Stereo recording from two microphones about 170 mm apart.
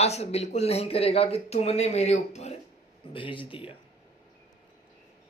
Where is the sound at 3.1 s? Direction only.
30° left (ahead or behind).